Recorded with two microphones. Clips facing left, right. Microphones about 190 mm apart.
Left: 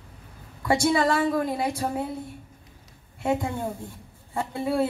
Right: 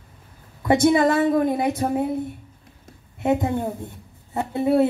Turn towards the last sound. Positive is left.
turn(degrees=-20)  # may be behind; listen again after turning